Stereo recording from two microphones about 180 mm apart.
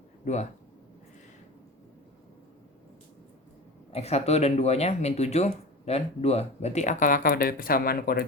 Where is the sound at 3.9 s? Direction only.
35° left (ahead or behind).